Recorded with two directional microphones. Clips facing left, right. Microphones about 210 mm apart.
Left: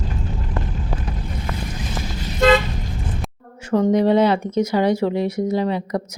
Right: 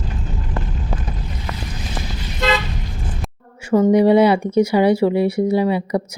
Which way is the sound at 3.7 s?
10° right (ahead or behind).